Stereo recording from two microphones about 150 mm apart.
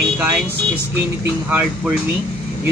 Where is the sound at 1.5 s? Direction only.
10° right (ahead or behind).